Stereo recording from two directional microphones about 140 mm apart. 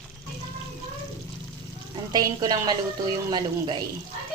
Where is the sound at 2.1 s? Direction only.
30° right (ahead or behind).